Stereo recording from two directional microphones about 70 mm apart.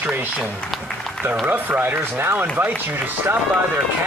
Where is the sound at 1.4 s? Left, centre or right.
Right.